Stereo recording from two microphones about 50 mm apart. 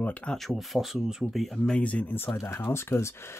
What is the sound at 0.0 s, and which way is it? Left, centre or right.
Speech, left.